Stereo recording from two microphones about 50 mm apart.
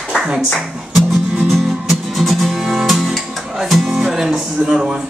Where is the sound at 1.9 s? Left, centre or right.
Centre.